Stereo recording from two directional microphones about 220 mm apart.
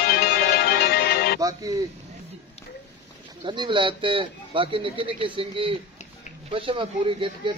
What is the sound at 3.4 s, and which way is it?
Speech, 20° right (ahead or behind).